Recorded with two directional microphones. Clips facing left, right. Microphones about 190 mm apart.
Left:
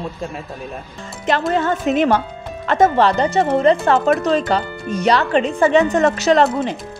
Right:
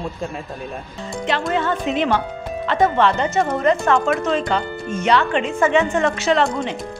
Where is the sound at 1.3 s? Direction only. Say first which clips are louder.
Left 3 dB; 40° left (ahead or behind).